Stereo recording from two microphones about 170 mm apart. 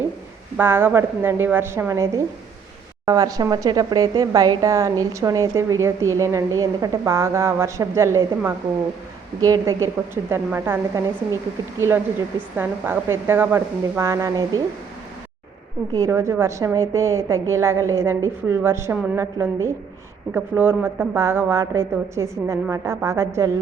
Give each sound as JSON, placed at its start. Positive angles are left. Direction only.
{"t": 0.5, "sound": "a woman's voice", "side_deg": -15}
{"t": 15.9, "sound": "a woman's voice", "side_deg": -20}